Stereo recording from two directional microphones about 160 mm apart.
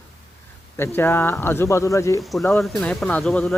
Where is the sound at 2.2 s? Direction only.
Centre (ahead or behind).